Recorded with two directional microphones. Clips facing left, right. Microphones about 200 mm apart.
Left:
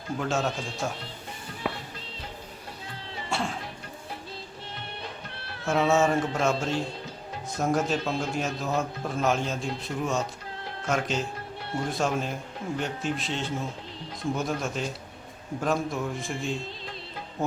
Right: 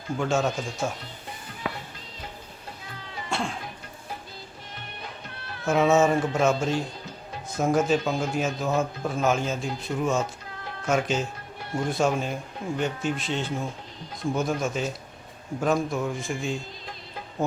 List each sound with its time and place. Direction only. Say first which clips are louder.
0.2 s a man's voice: right 4 dB; centre (ahead or behind)
3.2 s cough: right 1 dB; 5° left (ahead or behind)
5.3 s music: right 1 dB; 30° left (ahead or behind)
5.6 s a man's voice: right 3 dB; centre (ahead or behind)